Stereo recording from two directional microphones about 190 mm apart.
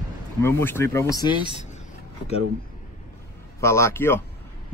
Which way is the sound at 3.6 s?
15° left (ahead or behind).